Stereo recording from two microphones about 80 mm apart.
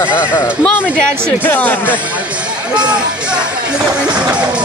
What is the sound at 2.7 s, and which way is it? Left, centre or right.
Speech, centre.